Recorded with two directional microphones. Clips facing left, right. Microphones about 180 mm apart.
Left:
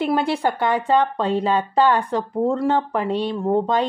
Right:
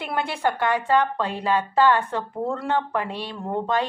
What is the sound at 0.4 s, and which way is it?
A woman's voice, 15° left (ahead or behind).